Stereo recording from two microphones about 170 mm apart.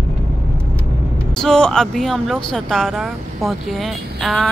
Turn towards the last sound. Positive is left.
turn(degrees=0)  # may be behind; listen again after turning